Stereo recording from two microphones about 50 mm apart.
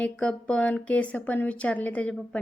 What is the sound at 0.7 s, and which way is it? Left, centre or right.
A woman's voice, left.